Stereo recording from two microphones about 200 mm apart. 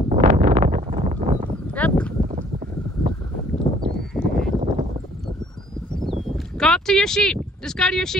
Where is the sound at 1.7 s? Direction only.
5° left (ahead or behind).